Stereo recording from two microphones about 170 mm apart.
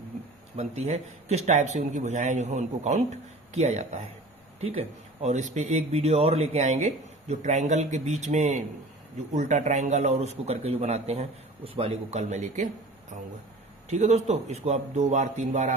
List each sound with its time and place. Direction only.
0.5 s speech: 40° right (ahead or behind)
13.9 s speech: 40° right (ahead or behind)